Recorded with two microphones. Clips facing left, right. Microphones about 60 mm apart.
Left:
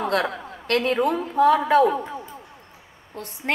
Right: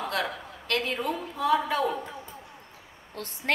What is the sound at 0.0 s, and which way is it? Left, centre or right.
A woman's voice, left.